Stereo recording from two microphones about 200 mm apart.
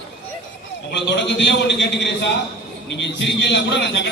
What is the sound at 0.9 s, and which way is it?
A man's voice, 60° left (ahead or behind).